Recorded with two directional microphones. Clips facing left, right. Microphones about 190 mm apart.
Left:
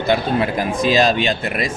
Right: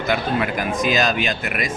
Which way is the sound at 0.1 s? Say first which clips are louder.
Left 4 dB; 30° left (ahead or behind).